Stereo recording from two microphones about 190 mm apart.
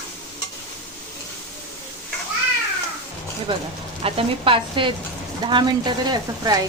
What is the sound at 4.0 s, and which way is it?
Speech, 30° right (ahead or behind).